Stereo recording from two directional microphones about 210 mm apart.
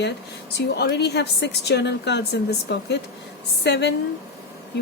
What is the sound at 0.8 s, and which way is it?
A woman's voice, 55° left (ahead or behind).